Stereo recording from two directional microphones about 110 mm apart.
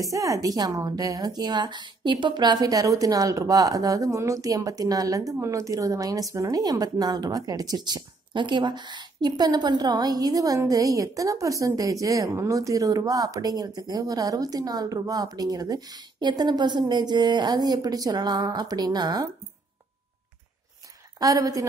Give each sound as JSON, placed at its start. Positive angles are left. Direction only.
{"t": 0.0, "sound": "a woman's voice", "side_deg": -30}
{"t": 21.2, "sound": "a woman's voice", "side_deg": -30}